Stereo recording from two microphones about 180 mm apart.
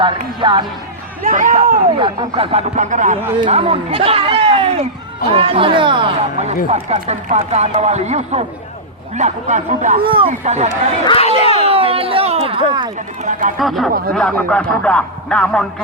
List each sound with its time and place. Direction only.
0.0 s speech: 25° right (ahead or behind)
1.2 s speech: 45° right (ahead or behind)
2.0 s speech: 30° right (ahead or behind)
3.4 s speech: 35° right (ahead or behind)
11.0 s a sound: 30° left (ahead or behind)
11.7 s a sound: 30° right (ahead or behind)
13.6 s speech: centre (ahead or behind)